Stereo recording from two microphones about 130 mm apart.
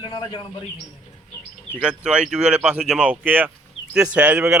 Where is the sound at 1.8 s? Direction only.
10° right (ahead or behind).